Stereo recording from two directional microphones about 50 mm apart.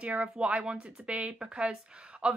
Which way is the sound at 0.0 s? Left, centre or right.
Right.